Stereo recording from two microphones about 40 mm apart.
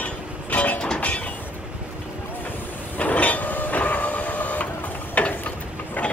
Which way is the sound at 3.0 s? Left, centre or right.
Left.